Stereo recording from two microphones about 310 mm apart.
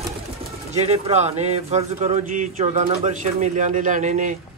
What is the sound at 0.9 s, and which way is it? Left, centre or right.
Speech, centre.